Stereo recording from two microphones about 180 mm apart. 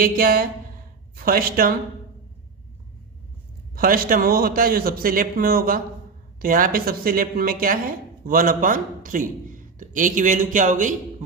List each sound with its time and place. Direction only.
0.0 s a woman's voice: 55° right (ahead or behind)
3.8 s speech: 55° right (ahead or behind)